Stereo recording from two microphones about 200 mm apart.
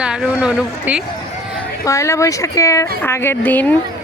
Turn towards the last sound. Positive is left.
turn(degrees=10)  # may be behind; listen again after turning